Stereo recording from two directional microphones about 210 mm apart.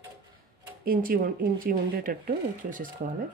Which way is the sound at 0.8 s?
40° right (ahead or behind).